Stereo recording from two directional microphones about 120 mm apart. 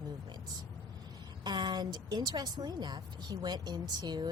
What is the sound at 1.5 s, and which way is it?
A woman's voice, 35° right (ahead or behind).